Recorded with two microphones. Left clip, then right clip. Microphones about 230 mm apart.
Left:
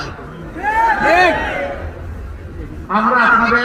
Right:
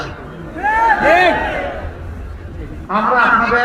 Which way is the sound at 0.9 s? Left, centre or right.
Centre.